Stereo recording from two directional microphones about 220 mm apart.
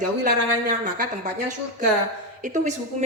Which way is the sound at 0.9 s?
35° right (ahead or behind).